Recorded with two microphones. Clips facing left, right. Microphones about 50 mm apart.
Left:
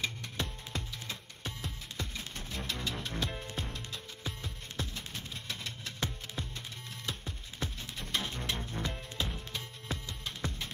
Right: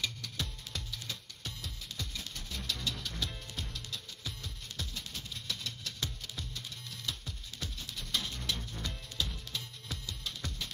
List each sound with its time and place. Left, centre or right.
0.0 s music: left